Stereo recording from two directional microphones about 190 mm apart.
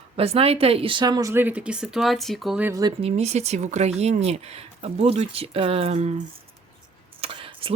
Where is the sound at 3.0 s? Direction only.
35° right (ahead or behind).